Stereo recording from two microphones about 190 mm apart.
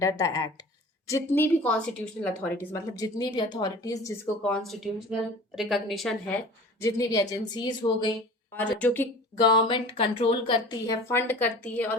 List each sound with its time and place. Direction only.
0.0 s a woman's voice: 15° left (ahead or behind)
2.7 s speech: 20° left (ahead or behind)
4.4 s a woman's voice: centre (ahead or behind)
6.8 s speech: 20° left (ahead or behind)
8.5 s a woman's voice: 10° left (ahead or behind)
9.4 s speech: 25° left (ahead or behind)
11.1 s a woman's voice: 10° left (ahead or behind)